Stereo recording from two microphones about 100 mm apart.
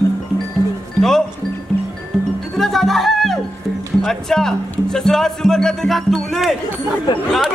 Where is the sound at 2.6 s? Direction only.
Centre (ahead or behind).